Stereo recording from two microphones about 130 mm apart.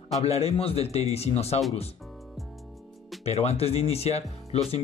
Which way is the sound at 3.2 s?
50° left (ahead or behind).